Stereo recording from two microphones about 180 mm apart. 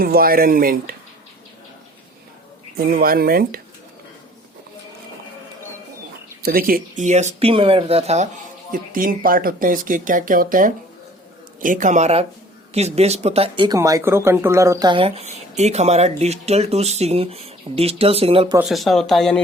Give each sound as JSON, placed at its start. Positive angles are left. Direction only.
{"t": 0.0, "sound": "speech", "side_deg": -55}
{"t": 2.7, "sound": "speech", "side_deg": -55}
{"t": 6.4, "sound": "speech", "side_deg": -55}
{"t": 8.7, "sound": "speech", "side_deg": -50}
{"t": 13.7, "sound": "speech", "side_deg": -20}
{"t": 18.7, "sound": "speech", "side_deg": 0}